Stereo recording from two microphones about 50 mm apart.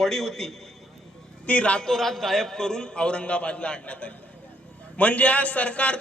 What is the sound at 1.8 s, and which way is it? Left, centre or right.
A man's voice, centre.